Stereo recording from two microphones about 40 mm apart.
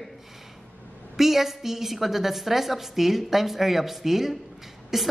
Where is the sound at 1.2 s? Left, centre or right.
Centre.